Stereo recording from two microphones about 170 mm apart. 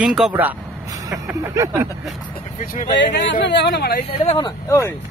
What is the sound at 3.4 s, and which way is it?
Speech, 75° left (ahead or behind).